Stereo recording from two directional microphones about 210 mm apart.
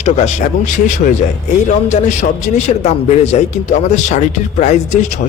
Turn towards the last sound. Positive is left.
turn(degrees=35)  # may be behind; listen again after turning